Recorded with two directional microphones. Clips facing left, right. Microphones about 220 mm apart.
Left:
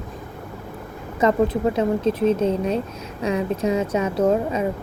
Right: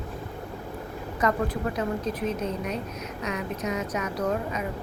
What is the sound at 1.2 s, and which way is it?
A woman's voice, 25° left (ahead or behind).